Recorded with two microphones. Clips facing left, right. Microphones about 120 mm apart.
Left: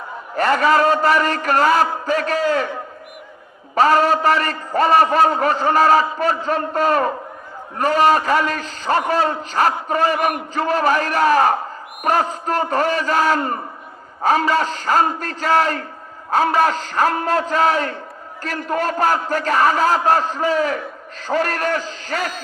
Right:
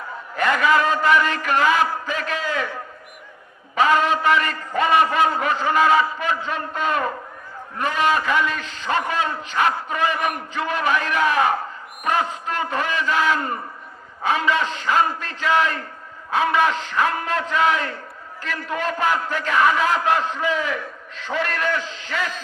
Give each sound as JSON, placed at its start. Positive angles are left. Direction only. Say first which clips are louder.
{"t": 0.3, "sound": "a man's voice", "louder": "left 3 dB", "side_deg": 35}
{"t": 3.8, "sound": "a man's voice", "louder": "left 4 dB", "side_deg": 35}